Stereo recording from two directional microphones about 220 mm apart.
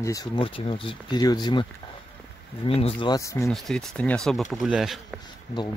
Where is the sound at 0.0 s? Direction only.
15° left (ahead or behind).